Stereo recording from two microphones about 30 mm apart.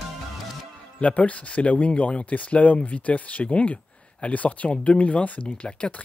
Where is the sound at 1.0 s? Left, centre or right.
Left.